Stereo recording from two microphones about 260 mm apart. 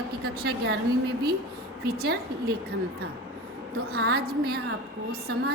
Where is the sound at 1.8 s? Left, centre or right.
Right.